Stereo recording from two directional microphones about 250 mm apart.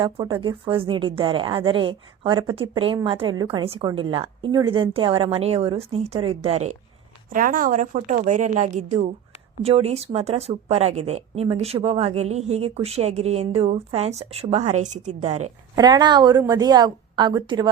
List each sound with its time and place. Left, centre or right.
0.0 s a woman's voice: centre
15.7 s a woman's voice: centre